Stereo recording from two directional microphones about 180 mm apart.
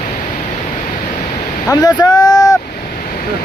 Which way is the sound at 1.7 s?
25° left (ahead or behind).